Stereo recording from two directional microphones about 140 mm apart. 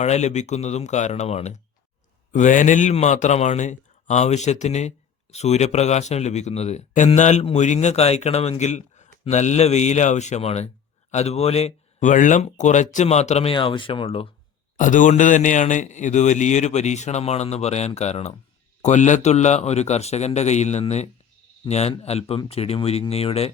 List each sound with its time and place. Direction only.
0.0 s speech: 55° left (ahead or behind)
2.3 s speech: 65° left (ahead or behind); by 14.3 s 40° left (ahead or behind)
14.8 s speech: 65° left (ahead or behind); by 23.5 s 45° left (ahead or behind)